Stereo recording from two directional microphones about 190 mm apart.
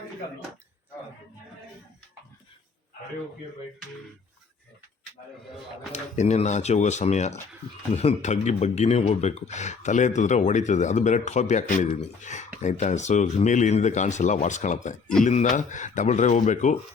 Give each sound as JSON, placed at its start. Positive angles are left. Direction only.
{"t": 5.9, "sound": "speech", "side_deg": 35}